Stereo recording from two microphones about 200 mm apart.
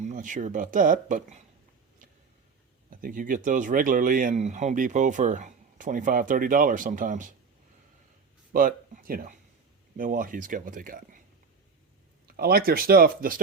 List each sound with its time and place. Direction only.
0.0 s speech: 40° right (ahead or behind)
2.9 s speech: 45° right (ahead or behind)
8.5 s speech: 45° right (ahead or behind)
12.4 s speech: 50° right (ahead or behind)